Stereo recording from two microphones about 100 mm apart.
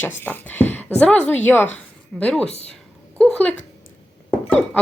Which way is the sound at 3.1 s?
15° left (ahead or behind).